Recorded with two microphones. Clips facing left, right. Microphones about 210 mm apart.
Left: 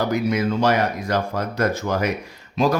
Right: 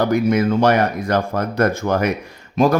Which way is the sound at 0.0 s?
55° right (ahead or behind).